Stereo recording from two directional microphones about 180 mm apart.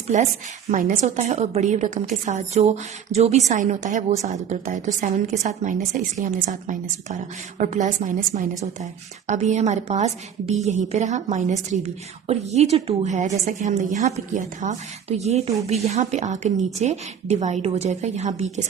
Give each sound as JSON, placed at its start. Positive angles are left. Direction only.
{"t": 0.1, "sound": "a woman's voice", "side_deg": -45}